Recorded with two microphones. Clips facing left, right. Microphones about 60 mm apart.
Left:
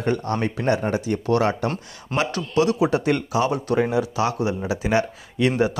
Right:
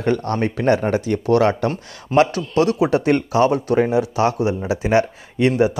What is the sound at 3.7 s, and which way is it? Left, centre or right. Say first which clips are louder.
Speech: right 4 dB; right.